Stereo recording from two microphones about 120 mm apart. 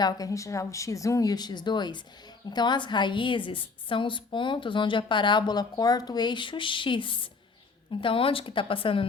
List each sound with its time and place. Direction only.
0.0 s a woman's voice: 30° left (ahead or behind); by 9.0 s 50° left (ahead or behind)